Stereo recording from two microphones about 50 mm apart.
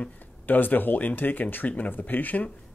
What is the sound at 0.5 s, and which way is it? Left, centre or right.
Speech, left.